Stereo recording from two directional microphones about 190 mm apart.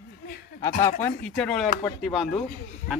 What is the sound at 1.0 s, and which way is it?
A man's voice, 10° left (ahead or behind).